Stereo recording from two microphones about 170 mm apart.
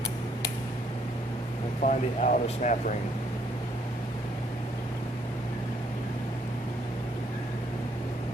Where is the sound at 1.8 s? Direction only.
50° left (ahead or behind).